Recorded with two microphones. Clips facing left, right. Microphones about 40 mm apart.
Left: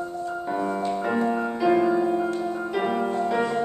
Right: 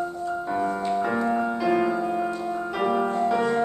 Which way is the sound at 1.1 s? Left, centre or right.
Centre.